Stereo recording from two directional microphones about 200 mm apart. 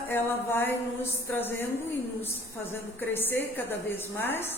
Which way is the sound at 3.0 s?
10° left (ahead or behind).